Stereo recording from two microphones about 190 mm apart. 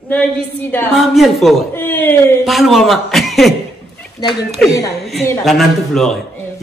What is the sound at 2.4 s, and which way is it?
A woman's voice, centre (ahead or behind).